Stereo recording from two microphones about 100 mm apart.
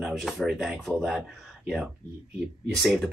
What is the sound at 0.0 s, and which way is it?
Speech, centre (ahead or behind).